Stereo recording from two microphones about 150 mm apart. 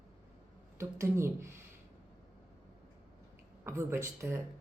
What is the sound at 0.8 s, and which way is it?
Speech, 20° right (ahead or behind).